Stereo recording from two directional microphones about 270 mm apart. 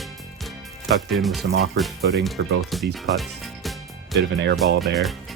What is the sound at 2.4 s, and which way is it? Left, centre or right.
Speech, right.